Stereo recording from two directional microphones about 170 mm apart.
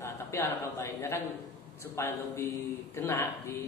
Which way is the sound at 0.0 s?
15° left (ahead or behind).